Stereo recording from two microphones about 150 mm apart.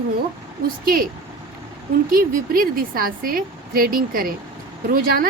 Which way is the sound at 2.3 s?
70° right (ahead or behind).